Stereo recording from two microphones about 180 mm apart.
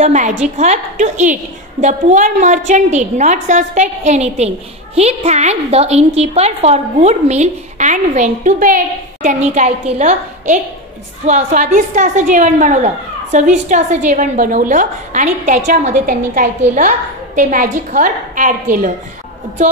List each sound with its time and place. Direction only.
0.0 s a woman's voice: 40° right (ahead or behind)